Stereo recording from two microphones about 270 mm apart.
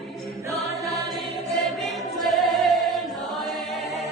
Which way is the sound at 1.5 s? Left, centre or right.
Centre.